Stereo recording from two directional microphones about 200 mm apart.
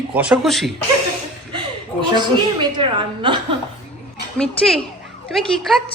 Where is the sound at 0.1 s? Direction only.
5° right (ahead or behind).